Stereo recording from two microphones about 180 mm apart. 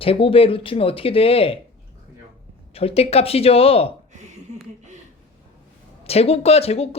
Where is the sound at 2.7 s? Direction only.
35° left (ahead or behind).